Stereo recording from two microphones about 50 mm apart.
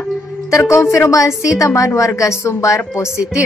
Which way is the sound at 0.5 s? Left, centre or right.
Left.